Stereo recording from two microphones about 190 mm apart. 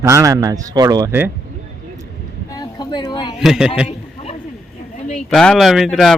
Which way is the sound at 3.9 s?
30° left (ahead or behind).